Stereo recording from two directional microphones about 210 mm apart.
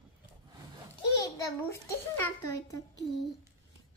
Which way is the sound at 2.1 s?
10° left (ahead or behind).